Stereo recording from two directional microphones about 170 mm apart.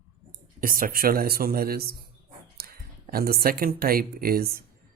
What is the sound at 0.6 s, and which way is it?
Speech, 55° right (ahead or behind).